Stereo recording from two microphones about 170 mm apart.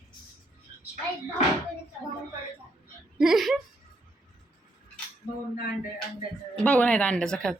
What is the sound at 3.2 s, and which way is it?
Speech, centre (ahead or behind).